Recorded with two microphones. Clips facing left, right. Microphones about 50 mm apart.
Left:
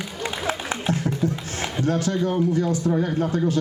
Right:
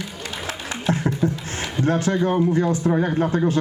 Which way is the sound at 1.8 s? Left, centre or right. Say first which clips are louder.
Right 3 dB; right.